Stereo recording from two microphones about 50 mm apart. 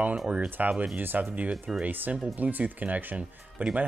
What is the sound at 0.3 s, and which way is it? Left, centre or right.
Speech, right.